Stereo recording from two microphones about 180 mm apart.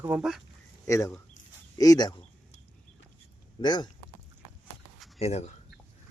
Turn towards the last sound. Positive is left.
turn(degrees=40)  # may be behind; listen again after turning